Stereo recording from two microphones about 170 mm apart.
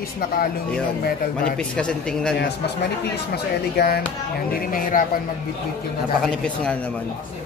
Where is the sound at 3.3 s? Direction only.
65° left (ahead or behind).